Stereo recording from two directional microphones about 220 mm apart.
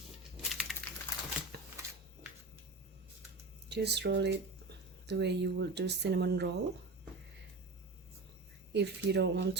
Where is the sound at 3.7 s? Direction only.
50° right (ahead or behind).